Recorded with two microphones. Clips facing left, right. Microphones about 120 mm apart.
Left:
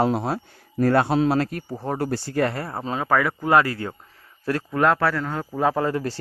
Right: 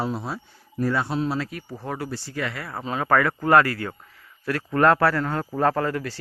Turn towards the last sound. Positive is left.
turn(degrees=25)  # may be behind; listen again after turning